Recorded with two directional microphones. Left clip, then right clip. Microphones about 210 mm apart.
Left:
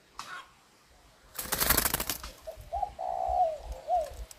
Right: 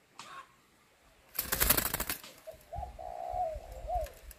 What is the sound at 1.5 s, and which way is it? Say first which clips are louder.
Bird: left 3 dB; 10° left (ahead or behind).